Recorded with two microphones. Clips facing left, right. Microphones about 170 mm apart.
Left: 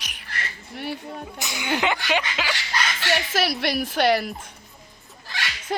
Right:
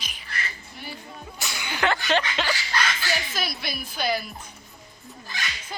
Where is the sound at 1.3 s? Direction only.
20° left (ahead or behind).